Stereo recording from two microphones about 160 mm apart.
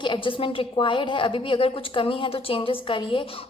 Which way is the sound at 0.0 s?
30° left (ahead or behind).